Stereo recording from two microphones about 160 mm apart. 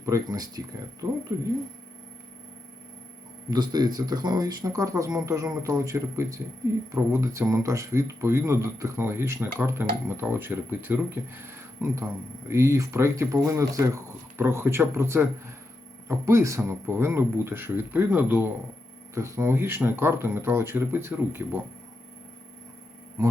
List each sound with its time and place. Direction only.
0.0 s speech: 20° right (ahead or behind)
3.5 s speech: 25° right (ahead or behind)